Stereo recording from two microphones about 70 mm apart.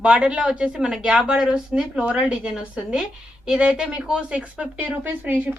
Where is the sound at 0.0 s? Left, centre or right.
Centre.